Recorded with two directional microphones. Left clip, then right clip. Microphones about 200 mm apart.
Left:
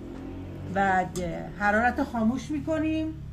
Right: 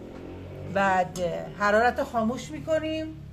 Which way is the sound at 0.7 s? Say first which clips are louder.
Right 1 dB; 45° right (ahead or behind).